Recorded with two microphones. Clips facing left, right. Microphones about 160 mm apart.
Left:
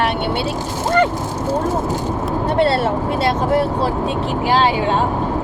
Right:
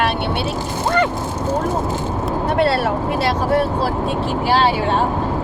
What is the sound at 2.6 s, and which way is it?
Speech, 25° left (ahead or behind).